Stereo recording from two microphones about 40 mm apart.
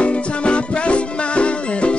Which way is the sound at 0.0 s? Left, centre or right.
Left.